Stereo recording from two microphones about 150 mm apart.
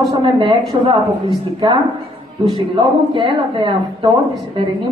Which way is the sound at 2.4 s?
30° right (ahead or behind).